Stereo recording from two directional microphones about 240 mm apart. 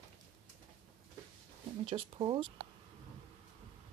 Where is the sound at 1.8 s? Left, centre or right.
Right.